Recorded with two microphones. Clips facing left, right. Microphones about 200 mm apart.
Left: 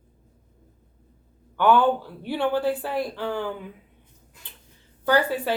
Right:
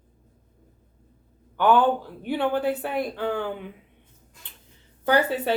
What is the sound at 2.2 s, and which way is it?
Speech, 20° right (ahead or behind).